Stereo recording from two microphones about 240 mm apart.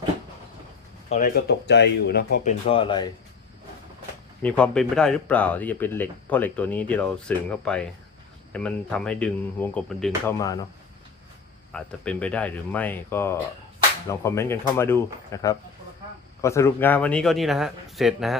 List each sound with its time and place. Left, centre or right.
1.1 s speech: left
4.4 s a man's voice: centre
11.7 s a man's voice: centre